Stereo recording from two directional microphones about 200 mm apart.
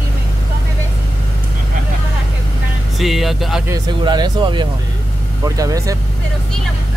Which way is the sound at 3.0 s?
Centre (ahead or behind).